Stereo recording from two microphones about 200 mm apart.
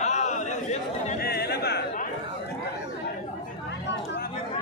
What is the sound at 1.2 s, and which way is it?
Chatter, 50° left (ahead or behind).